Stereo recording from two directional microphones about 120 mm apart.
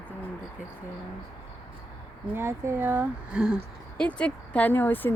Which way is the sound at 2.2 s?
20° right (ahead or behind).